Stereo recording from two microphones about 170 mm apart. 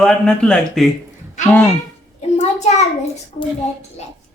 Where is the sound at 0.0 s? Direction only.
5° left (ahead or behind).